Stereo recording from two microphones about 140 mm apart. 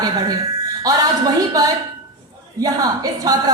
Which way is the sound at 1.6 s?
25° right (ahead or behind).